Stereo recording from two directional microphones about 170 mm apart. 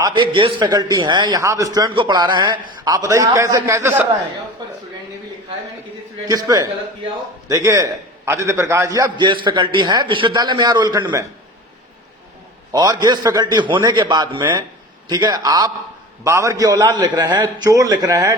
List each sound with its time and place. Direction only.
0.0 s a man's voice: 30° right (ahead or behind)
4.6 s a sound: 25° right (ahead or behind)
6.2 s a man's voice: 20° right (ahead or behind)
12.7 s a man's voice: 20° right (ahead or behind)